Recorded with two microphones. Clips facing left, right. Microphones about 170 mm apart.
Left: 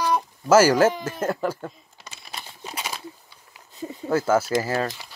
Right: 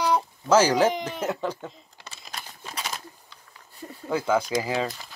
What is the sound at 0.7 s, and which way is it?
Speech, 15° right (ahead or behind).